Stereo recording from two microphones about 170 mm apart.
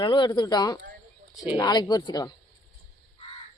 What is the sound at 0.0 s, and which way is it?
Speech, 25° left (ahead or behind).